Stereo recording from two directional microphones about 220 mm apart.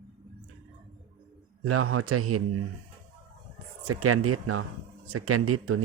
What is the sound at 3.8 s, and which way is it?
Speech, 85° right.